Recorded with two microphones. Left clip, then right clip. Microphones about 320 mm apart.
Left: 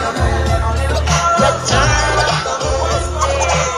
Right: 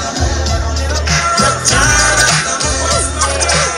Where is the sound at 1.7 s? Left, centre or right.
Right.